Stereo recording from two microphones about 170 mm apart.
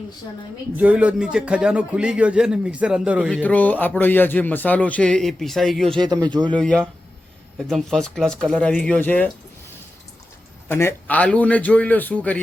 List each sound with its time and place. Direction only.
0.8 s a man's voice: 10° right (ahead or behind)
3.2 s a man's voice: 10° left (ahead or behind)
6.2 s speech: 25° right (ahead or behind)
6.5 s speech: 5° left (ahead or behind)
10.7 s a man's voice: 15° left (ahead or behind)